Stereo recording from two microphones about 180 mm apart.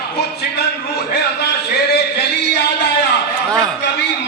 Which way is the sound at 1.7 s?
65° left (ahead or behind).